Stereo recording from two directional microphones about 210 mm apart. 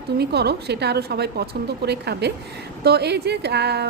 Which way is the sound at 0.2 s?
50° right (ahead or behind).